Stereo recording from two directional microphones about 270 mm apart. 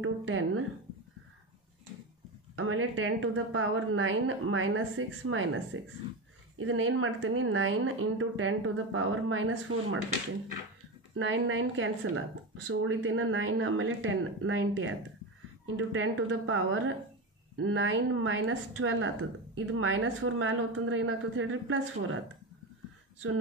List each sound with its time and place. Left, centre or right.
0.0 s speech: right
2.5 s a woman's voice: right
11.1 s a woman's voice: right